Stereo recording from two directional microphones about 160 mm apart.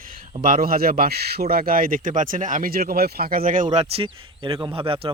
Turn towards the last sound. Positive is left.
turn(degrees=-35)  # may be behind; listen again after turning